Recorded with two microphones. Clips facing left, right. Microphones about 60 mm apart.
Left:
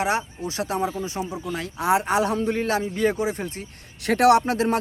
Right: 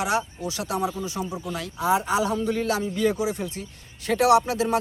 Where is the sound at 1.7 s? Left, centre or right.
Left.